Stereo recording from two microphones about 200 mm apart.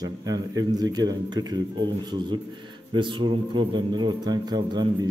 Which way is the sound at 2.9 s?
25° right (ahead or behind).